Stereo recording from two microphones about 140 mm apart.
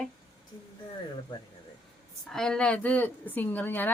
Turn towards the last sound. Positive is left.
turn(degrees=15)  # may be behind; listen again after turning